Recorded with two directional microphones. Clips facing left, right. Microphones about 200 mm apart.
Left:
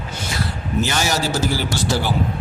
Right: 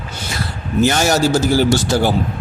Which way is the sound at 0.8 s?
50° right (ahead or behind).